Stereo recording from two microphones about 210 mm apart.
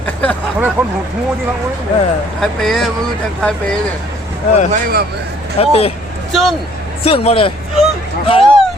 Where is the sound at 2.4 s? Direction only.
Centre (ahead or behind).